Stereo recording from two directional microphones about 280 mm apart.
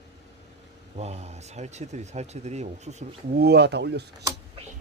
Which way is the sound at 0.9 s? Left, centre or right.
Right.